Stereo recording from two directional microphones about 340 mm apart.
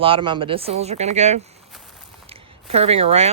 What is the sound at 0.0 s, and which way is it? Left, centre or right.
Speech, centre.